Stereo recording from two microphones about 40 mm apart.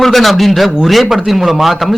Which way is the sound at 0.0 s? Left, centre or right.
Centre.